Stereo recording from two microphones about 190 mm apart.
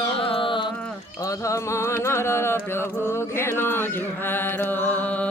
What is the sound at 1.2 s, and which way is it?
Mantra, 15° left (ahead or behind).